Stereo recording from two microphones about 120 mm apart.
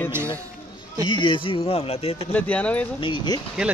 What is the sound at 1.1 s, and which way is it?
Speech, 40° left (ahead or behind).